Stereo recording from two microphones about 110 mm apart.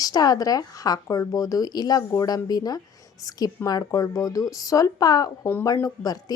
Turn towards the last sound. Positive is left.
turn(degrees=35)  # may be behind; listen again after turning